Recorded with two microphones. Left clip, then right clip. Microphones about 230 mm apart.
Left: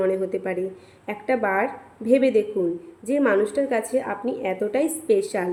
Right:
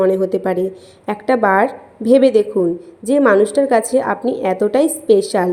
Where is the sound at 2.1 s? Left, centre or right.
Centre.